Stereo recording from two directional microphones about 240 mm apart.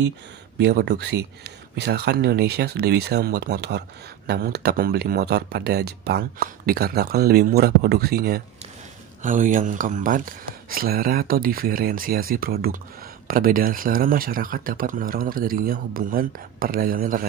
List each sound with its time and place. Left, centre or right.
0.6 s speech: right